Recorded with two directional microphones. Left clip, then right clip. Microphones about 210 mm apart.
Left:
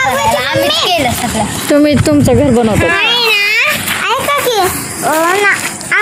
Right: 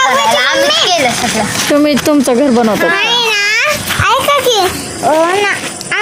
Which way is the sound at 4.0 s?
40° right (ahead or behind).